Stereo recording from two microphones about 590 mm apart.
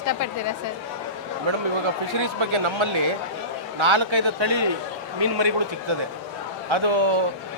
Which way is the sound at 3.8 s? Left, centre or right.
Right.